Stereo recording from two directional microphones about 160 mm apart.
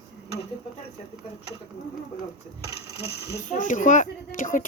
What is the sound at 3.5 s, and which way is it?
A woman's voice, 50° left (ahead or behind).